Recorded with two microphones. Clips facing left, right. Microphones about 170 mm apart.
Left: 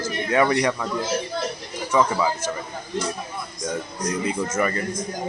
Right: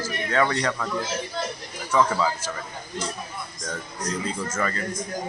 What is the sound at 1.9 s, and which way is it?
Speech, 10° left (ahead or behind).